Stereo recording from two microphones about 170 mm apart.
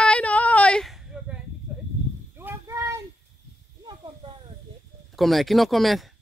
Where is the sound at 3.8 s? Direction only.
25° right (ahead or behind).